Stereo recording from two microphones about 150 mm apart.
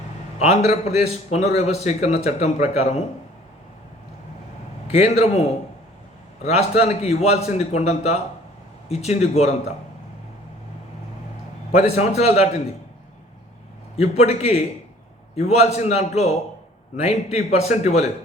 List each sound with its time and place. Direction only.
0.3 s a man's voice: 45° left (ahead or behind)
4.9 s a man's voice: 45° left (ahead or behind)
11.7 s a man's voice: 45° left (ahead or behind)
13.9 s a man's voice: 45° left (ahead or behind)